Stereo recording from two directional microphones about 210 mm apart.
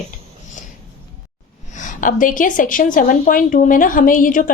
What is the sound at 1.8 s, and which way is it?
A woman's voice, 40° left (ahead or behind).